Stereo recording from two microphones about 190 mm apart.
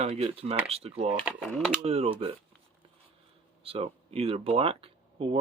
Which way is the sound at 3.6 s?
30° right (ahead or behind).